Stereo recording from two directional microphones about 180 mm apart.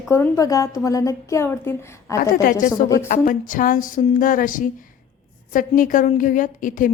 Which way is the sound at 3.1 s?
50° left (ahead or behind).